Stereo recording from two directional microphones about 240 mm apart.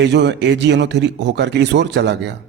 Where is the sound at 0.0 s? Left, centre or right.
Right.